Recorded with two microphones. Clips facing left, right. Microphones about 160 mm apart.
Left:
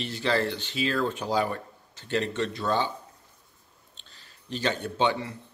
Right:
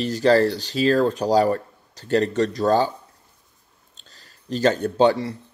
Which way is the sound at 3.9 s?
40° right (ahead or behind).